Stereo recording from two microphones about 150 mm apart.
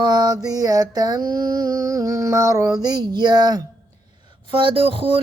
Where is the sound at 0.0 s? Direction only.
25° right (ahead or behind).